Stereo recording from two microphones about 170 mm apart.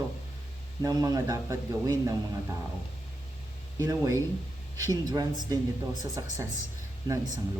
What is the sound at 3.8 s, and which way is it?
Speech, 20° right (ahead or behind).